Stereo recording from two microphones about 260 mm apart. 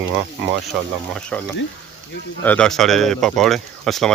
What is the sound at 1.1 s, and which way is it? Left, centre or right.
Speech, centre.